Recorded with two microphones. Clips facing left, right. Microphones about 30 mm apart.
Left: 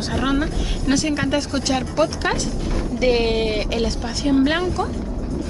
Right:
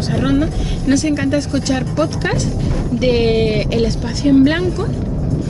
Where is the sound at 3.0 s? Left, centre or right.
Centre.